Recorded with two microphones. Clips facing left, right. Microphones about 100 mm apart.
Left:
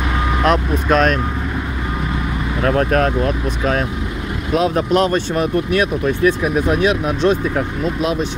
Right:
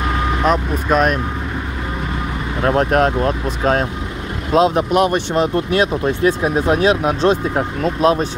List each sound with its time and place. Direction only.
0.4 s speech: 5° right (ahead or behind)
2.6 s speech: 30° right (ahead or behind)
4.7 s speech: 15° right (ahead or behind)
5.5 s speech: 30° right (ahead or behind)
7.8 s speech: 40° right (ahead or behind)